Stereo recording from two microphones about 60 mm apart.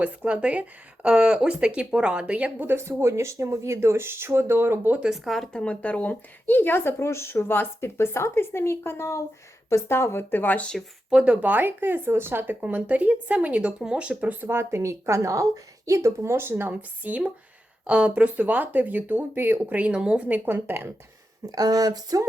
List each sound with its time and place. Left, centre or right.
0.0 s speech: right
2.6 s speech: right
5.0 s speech: centre
5.5 s speech: left
10.8 s speech: centre
11.3 s speech: right
12.6 s speech: right
14.4 s speech: right
17.1 s speech: right
20.4 s speech: right
21.4 s speech: right